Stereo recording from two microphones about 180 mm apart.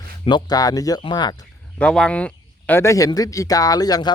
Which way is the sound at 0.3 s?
25° left (ahead or behind).